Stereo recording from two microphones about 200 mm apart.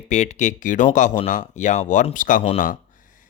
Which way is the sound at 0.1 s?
35° left (ahead or behind).